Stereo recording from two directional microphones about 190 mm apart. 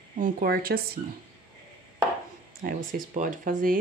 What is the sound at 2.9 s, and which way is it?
Speech, 45° right (ahead or behind).